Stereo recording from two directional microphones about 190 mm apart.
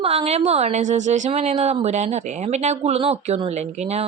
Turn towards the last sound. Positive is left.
turn(degrees=-35)  # may be behind; listen again after turning